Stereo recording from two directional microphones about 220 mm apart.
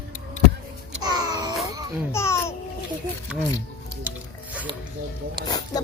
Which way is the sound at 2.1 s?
10° left (ahead or behind).